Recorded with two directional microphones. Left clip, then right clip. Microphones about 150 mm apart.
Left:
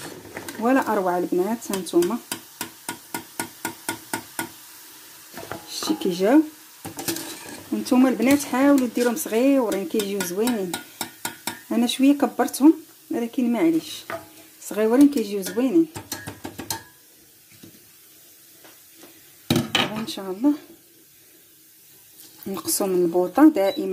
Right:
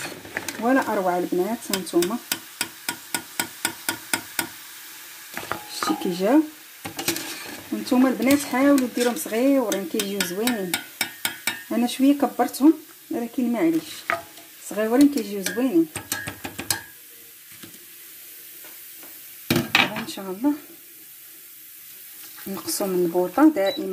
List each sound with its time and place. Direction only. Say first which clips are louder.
0.0 s sewing machine: right 5 dB; centre (ahead or behind)
5.4 s music: right 4 dB; 5° right (ahead or behind)
5.8 s speech: left 2 dB; 5° left (ahead or behind)
7.7 s speech: left 1 dB; 10° left (ahead or behind)
11.4 s stir: left 2 dB; 10° left (ahead or behind)
14.7 s speech: left 2 dB; 10° left (ahead or behind)
20.1 s speech: left 2 dB; 15° left (ahead or behind)
22.5 s speech: left 2 dB; 20° left (ahead or behind)